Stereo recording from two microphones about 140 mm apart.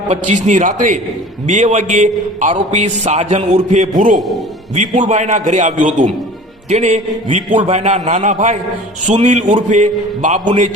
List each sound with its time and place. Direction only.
0.1 s a man's voice: 60° right (ahead or behind)
4.1 s a man's voice: centre (ahead or behind)
4.7 s a man's voice: 55° right (ahead or behind)